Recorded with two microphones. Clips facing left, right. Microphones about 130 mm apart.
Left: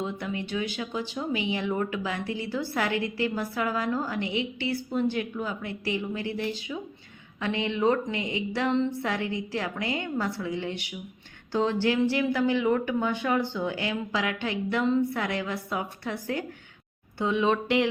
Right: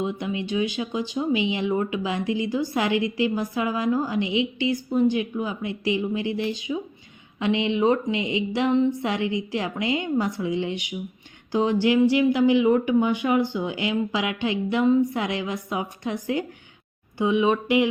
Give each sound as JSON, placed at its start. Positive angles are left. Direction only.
{"t": 0.0, "sound": "speech", "side_deg": -15}